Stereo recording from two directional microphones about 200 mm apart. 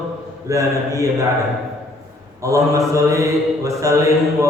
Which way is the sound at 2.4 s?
15° right (ahead or behind).